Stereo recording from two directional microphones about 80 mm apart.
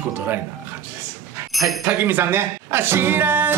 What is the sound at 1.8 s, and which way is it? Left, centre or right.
Speech, right.